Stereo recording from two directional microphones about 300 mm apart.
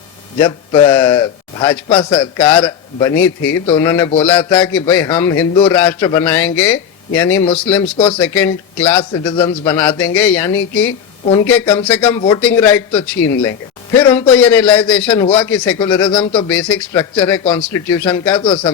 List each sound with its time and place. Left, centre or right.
0.3 s a man's voice: centre
2.1 s a man's voice: centre
10.5 s a woman's voice: left
11.3 s a man's voice: centre
18.4 s a man's voice: centre